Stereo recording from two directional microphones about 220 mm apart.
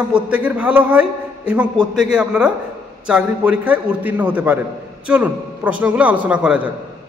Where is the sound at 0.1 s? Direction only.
5° right (ahead or behind).